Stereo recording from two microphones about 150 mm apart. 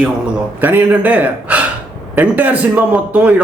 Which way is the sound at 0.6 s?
10° right (ahead or behind).